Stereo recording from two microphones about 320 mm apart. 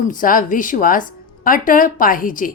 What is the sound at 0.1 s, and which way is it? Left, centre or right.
A woman's voice, left.